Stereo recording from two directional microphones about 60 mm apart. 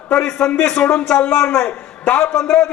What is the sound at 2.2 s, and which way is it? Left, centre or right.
Speech, centre.